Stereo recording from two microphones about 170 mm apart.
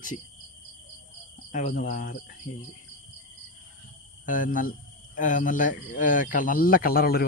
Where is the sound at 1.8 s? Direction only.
50° left (ahead or behind).